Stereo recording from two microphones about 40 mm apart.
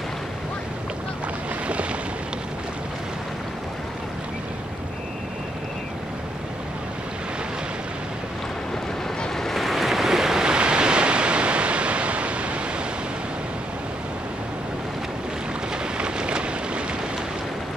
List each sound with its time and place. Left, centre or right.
1.7 s boat: right
9.4 s waves: centre
10.4 s waves: right
16.0 s boat: right